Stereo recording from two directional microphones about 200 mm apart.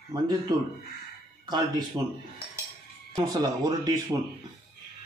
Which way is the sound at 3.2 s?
20° right (ahead or behind).